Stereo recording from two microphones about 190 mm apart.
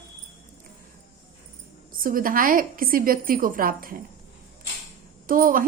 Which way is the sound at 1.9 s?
45° right (ahead or behind).